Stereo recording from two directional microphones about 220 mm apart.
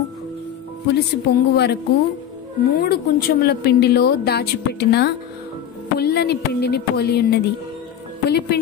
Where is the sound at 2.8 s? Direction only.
45° left (ahead or behind).